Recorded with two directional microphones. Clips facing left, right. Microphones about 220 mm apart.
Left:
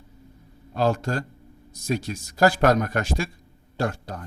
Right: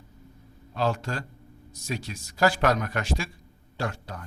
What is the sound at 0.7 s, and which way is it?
Speech, 45° left (ahead or behind).